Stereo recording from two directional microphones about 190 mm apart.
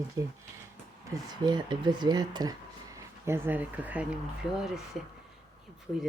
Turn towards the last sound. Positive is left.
turn(degrees=0)  # may be behind; listen again after turning